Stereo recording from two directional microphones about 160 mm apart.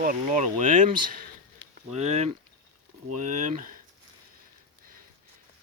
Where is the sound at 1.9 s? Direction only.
45° right (ahead or behind).